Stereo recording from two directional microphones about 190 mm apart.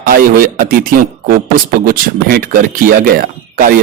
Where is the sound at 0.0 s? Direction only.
50° right (ahead or behind).